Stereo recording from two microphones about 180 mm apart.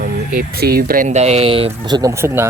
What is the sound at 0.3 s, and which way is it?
Speech, 60° right (ahead or behind).